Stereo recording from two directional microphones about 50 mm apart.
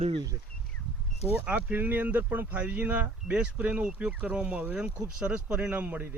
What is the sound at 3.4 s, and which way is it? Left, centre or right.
Speech, right.